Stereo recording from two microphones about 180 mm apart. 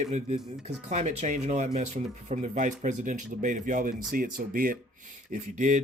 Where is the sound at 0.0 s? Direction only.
40° right (ahead or behind).